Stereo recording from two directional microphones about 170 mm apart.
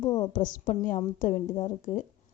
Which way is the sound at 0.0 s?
25° left (ahead or behind).